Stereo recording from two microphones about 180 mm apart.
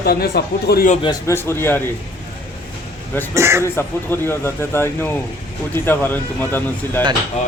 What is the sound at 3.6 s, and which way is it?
Speech, 15° left (ahead or behind).